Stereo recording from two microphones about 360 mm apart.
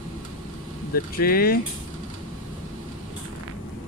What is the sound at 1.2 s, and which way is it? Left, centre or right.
Speech, left.